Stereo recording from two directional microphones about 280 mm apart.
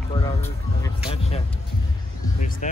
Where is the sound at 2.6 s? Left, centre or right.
Left.